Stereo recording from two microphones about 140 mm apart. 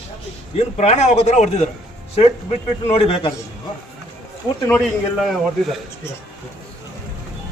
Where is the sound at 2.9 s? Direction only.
45° left (ahead or behind).